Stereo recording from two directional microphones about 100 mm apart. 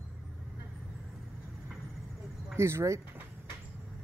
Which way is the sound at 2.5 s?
25° right (ahead or behind).